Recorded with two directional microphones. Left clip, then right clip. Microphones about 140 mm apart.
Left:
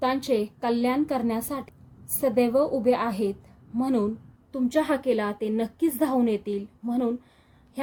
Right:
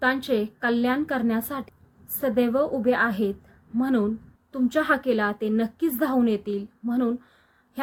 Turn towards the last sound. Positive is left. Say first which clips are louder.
# right 1 dB
turn(degrees=20)  # may be behind; listen again after turning